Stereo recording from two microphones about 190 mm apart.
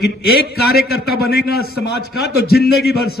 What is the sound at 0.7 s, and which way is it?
A man's voice, 55° left (ahead or behind).